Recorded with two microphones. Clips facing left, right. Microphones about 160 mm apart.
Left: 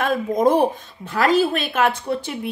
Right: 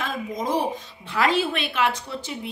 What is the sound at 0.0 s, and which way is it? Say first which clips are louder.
Speech: left 10 dB; 55° left (ahead or behind).